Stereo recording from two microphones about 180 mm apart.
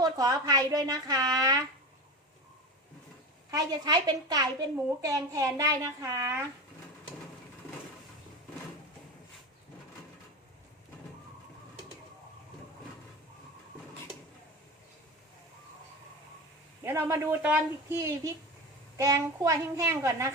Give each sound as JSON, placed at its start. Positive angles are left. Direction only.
{"t": 0.0, "sound": "a woman's voice", "side_deg": -20}
{"t": 3.5, "sound": "a woman's voice", "side_deg": -20}
{"t": 16.8, "sound": "a woman's voice", "side_deg": -15}